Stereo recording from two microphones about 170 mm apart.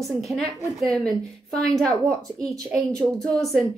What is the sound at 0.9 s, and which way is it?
Speech, 5° left (ahead or behind).